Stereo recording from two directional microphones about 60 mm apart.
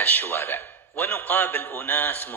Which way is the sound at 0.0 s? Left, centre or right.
Left.